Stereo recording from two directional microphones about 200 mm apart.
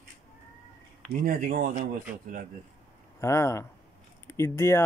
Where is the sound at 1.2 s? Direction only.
45° right (ahead or behind).